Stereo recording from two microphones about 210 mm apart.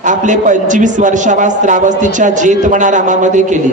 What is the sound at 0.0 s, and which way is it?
A man's voice, 35° right (ahead or behind).